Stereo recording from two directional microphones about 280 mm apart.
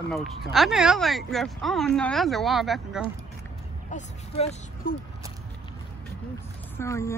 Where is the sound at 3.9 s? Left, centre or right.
Left.